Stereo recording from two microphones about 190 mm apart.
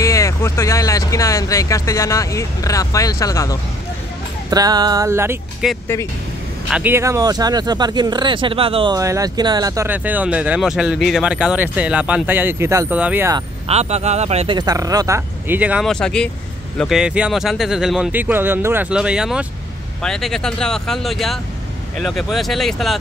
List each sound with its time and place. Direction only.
0.0 s speech: 15° left (ahead or behind)
4.5 s speech: 20° right (ahead or behind)
6.7 s speech: 10° right (ahead or behind)
13.7 s speech: 35° right (ahead or behind)
14.6 s speech: 20° right (ahead or behind); by 22.9 s centre (ahead or behind)